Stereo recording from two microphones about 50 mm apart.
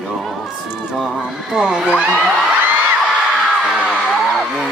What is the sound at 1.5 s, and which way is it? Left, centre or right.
Speech, centre.